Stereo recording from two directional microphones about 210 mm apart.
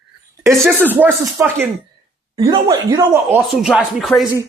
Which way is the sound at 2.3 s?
25° right (ahead or behind).